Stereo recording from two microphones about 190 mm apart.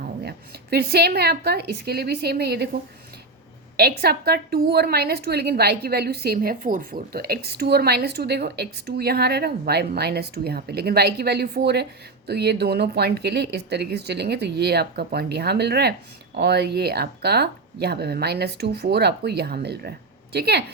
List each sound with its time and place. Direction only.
0.3 s a woman's voice: 55° right (ahead or behind)
3.8 s a woman's voice: 55° right (ahead or behind)